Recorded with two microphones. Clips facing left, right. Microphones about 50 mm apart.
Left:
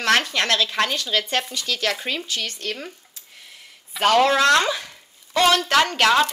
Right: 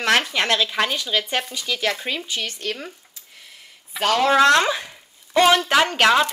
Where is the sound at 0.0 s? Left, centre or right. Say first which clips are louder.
Even; centre.